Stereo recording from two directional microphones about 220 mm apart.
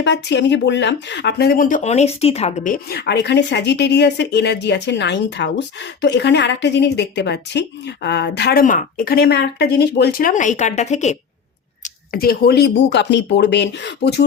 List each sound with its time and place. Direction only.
0.0 s speech: 50° left (ahead or behind); by 11.2 s 30° left (ahead or behind)
11.8 s speech: 40° left (ahead or behind)